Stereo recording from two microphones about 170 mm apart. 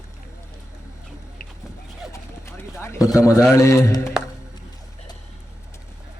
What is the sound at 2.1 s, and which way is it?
Horse, 15° left (ahead or behind).